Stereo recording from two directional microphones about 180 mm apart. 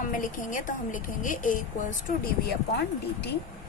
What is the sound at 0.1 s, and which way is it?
A woman's voice, 45° left (ahead or behind).